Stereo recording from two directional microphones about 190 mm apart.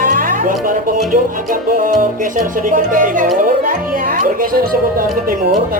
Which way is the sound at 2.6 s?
45° right (ahead or behind).